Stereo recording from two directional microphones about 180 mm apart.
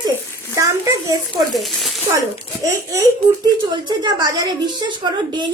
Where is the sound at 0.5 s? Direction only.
20° right (ahead or behind).